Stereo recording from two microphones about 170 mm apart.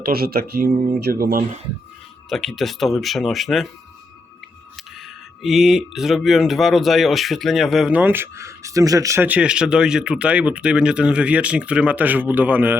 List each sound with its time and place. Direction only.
0.0 s speech: 65° right (ahead or behind)
0.9 s speech: 65° right (ahead or behind)
2.3 s speech: centre (ahead or behind)
4.8 s speech: centre (ahead or behind)